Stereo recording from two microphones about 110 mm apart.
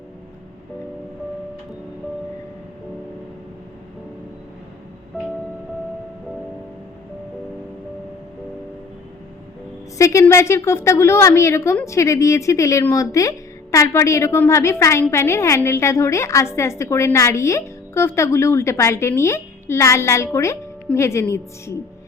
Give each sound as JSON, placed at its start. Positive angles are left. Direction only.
{"t": 10.0, "sound": "a woman's voice", "side_deg": 25}